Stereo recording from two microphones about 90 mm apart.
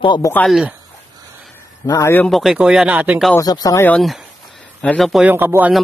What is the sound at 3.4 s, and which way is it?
Speech, 45° left (ahead or behind).